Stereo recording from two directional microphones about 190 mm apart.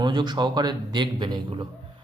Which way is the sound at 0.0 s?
25° right (ahead or behind).